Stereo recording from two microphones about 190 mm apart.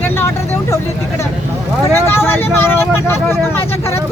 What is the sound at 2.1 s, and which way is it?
Speech, 10° left (ahead or behind).